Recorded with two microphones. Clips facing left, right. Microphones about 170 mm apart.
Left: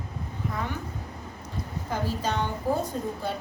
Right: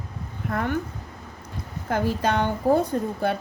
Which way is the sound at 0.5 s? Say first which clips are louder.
Right 8 dB; 60° right (ahead or behind).